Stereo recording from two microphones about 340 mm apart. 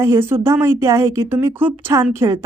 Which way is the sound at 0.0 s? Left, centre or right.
Centre.